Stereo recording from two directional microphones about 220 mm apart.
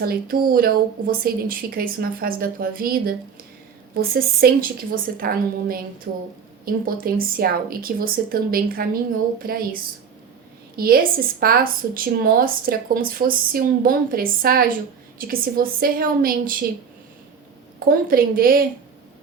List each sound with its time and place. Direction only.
0.0 s a woman's voice: 45° right (ahead or behind)
10.8 s speech: 45° right (ahead or behind)
17.7 s speech: 40° right (ahead or behind)